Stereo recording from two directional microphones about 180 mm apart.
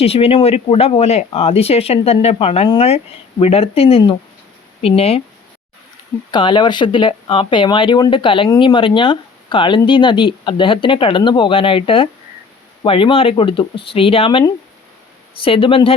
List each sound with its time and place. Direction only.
0.0 s speech: 35° left (ahead or behind)
6.3 s speech: 25° left (ahead or behind)